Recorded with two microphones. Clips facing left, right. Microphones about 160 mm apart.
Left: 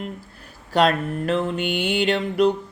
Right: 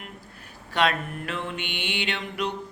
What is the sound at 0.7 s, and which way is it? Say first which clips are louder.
Mantra: left 6 dB; 40° left (ahead or behind).